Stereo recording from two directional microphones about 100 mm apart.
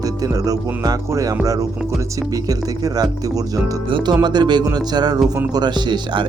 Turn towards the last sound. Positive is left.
turn(degrees=-45)  # may be behind; listen again after turning